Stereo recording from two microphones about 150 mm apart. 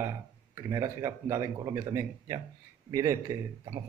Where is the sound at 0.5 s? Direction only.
20° right (ahead or behind).